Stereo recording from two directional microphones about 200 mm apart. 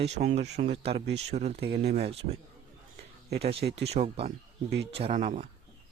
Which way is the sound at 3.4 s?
30° right (ahead or behind).